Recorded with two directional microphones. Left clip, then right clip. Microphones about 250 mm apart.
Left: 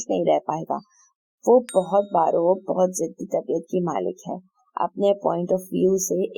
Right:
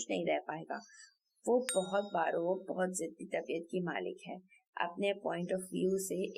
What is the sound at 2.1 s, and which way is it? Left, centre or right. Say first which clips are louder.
Speech: left 14 dB; left.